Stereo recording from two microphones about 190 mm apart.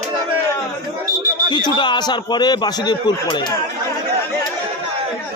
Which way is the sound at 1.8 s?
20° left (ahead or behind).